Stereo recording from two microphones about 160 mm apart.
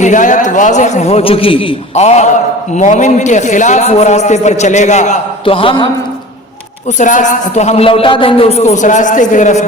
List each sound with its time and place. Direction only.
0.0 s a man's voice: 50° left (ahead or behind)
5.5 s a man's voice: 35° left (ahead or behind)
7.0 s a man's voice: 50° left (ahead or behind)